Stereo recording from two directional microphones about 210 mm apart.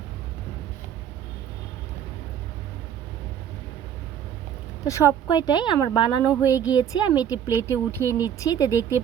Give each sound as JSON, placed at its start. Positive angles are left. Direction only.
{"t": 5.3, "sound": "a woman's voice", "side_deg": 20}